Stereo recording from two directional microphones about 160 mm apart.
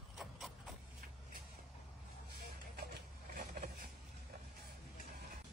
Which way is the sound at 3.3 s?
65° right (ahead or behind).